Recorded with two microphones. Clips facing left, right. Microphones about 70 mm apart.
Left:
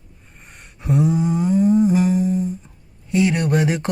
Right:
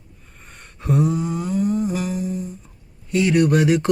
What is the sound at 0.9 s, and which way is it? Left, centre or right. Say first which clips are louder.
Humming: left 2 dB; left.